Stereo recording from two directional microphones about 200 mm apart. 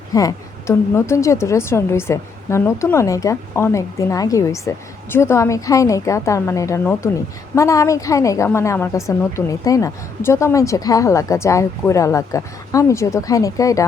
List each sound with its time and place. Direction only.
0.1 s a woman's voice: 15° left (ahead or behind)